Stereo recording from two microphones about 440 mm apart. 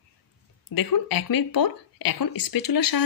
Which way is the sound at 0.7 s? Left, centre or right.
Left.